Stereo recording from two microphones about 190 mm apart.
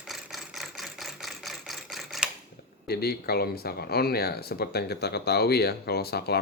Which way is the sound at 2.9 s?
55° left (ahead or behind).